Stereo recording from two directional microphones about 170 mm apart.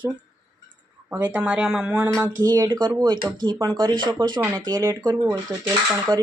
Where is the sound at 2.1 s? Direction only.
15° right (ahead or behind).